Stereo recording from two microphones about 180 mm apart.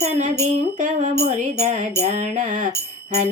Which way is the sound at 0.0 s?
40° right (ahead or behind).